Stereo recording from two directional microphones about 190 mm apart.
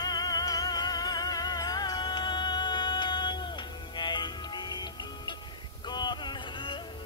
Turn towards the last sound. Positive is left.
turn(degrees=25)  # may be behind; listen again after turning